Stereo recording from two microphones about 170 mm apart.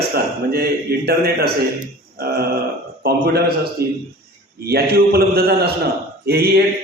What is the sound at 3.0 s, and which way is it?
A man's voice, 65° right (ahead or behind).